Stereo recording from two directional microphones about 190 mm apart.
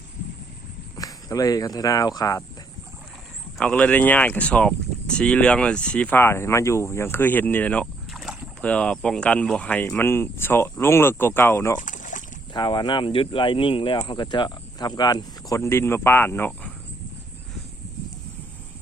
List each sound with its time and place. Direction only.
0.9 s speech: 20° left (ahead or behind)
3.6 s speech: 5° left (ahead or behind)
11.8 s boat: 40° left (ahead or behind)
12.5 s speech: 25° left (ahead or behind)